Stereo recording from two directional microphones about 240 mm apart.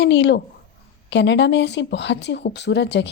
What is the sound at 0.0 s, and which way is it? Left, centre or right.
Speech, left.